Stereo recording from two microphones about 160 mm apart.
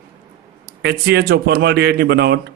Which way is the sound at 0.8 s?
90° right.